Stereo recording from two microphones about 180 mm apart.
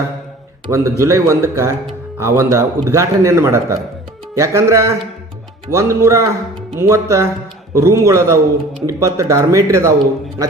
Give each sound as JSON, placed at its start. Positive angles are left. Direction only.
{"t": 0.7, "sound": "a man's voice", "side_deg": -15}